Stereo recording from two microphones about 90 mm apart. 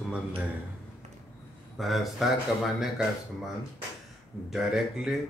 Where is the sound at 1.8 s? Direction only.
Centre (ahead or behind).